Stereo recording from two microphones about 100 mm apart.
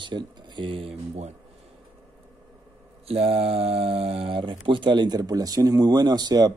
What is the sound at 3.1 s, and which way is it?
Speech, 85° right.